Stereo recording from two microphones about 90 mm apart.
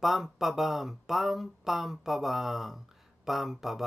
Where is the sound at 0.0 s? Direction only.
Centre (ahead or behind).